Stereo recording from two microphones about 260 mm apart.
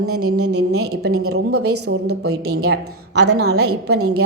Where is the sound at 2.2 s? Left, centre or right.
Right.